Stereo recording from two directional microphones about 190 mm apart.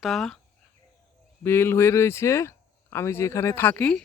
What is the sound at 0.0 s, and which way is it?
Speech, centre (ahead or behind).